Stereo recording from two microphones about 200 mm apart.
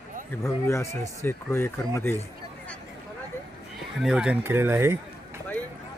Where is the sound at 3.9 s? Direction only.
5° right (ahead or behind).